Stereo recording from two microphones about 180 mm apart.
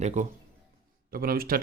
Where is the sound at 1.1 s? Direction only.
55° right (ahead or behind).